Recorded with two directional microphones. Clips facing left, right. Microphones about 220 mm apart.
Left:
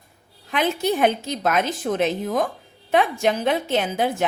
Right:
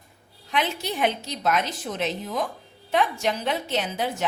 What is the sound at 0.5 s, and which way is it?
A woman's voice, 50° left (ahead or behind).